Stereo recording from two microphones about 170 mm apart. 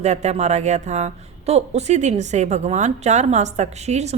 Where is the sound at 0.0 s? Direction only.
40° right (ahead or behind).